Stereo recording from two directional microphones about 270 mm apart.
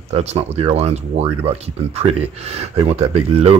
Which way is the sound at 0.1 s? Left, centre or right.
Right.